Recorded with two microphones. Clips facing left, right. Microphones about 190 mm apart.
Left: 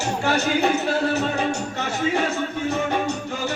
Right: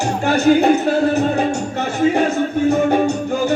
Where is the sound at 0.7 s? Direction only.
30° right (ahead or behind).